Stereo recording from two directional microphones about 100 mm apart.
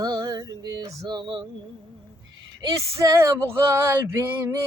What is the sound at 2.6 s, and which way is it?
Speech, 35° right (ahead or behind).